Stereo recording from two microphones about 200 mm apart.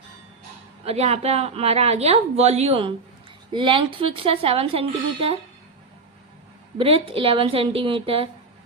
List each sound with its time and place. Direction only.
0.9 s a woman's voice: 30° right (ahead or behind)
6.7 s speech: 30° right (ahead or behind)